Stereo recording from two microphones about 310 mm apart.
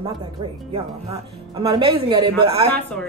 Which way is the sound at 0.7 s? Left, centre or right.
Centre.